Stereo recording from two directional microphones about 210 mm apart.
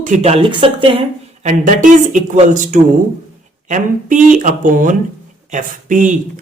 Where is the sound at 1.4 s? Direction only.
40° right (ahead or behind).